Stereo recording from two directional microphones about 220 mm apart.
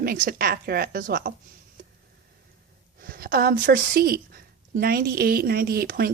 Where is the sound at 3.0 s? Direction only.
45° right (ahead or behind).